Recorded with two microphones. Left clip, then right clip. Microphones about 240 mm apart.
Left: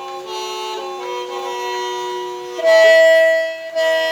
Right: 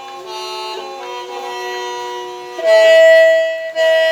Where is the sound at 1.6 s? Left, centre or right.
Left.